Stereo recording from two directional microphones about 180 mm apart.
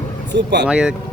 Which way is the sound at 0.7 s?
5° right (ahead or behind).